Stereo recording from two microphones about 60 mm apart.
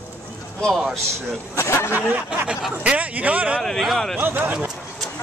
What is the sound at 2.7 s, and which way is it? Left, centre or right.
Speech, right.